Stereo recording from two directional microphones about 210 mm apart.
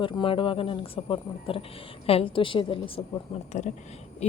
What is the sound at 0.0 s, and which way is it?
A woman's voice, 25° left (ahead or behind).